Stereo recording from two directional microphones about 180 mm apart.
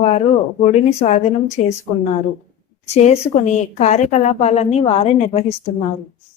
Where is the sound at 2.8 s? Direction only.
40° left (ahead or behind).